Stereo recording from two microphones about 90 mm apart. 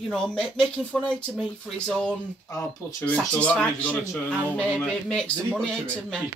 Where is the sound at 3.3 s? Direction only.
15° left (ahead or behind).